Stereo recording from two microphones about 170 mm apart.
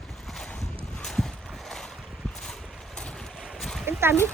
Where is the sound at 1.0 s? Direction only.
5° left (ahead or behind).